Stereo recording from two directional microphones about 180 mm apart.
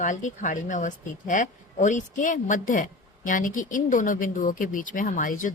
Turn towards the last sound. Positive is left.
turn(degrees=45)  # may be behind; listen again after turning